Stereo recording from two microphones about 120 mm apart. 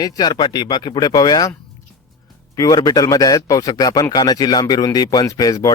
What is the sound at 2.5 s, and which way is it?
A man's voice, 30° left (ahead or behind).